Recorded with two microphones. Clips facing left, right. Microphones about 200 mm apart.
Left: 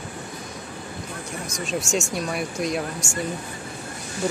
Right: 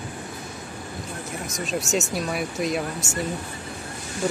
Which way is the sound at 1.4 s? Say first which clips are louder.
Even; centre (ahead or behind).